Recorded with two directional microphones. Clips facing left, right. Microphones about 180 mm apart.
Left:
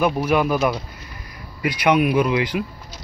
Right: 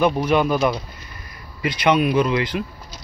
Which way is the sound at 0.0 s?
5° left (ahead or behind).